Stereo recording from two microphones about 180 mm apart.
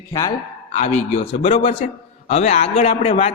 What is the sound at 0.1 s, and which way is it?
Speech, 20° left (ahead or behind).